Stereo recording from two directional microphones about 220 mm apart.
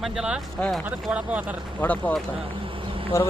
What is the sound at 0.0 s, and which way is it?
Speech, centre (ahead or behind).